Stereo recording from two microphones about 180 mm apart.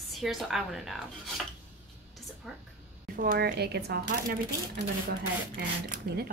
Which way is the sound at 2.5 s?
Centre (ahead or behind).